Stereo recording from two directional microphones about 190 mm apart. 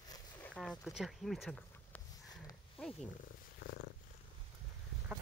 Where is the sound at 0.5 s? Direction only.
Centre (ahead or behind).